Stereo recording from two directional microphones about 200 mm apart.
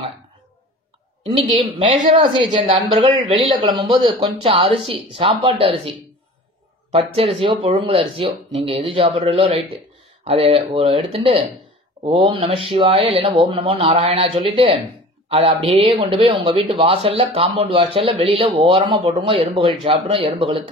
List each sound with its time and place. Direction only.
2.2 s speech: 25° right (ahead or behind)